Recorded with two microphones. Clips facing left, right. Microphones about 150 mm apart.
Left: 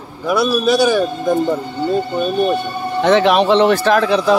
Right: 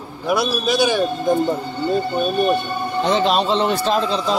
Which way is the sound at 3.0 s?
70° left (ahead or behind).